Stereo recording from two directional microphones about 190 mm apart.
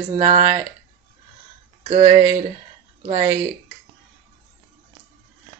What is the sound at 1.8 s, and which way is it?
Speech, 30° right (ahead or behind).